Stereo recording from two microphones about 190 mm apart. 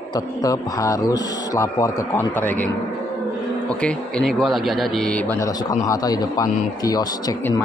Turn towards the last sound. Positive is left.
turn(degrees=15)  # may be behind; listen again after turning